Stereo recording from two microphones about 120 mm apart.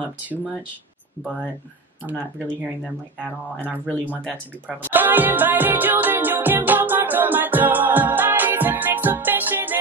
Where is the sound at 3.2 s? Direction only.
15° right (ahead or behind).